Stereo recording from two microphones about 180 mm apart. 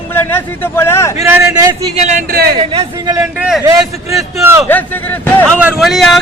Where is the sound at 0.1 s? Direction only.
10° left (ahead or behind).